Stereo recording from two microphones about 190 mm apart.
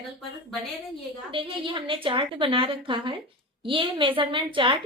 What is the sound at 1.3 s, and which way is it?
A woman's voice, 25° right (ahead or behind).